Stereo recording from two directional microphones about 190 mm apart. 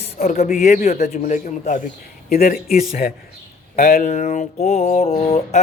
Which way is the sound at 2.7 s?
35° left (ahead or behind).